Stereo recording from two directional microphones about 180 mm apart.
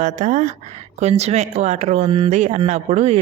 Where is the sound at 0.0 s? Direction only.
40° right (ahead or behind).